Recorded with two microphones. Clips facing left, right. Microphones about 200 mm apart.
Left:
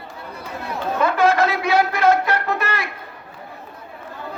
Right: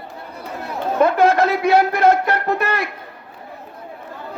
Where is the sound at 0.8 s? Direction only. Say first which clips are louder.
Right 3 dB; 60° right (ahead or behind).